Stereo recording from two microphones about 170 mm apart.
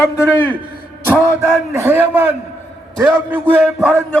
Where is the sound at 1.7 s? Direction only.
15° right (ahead or behind).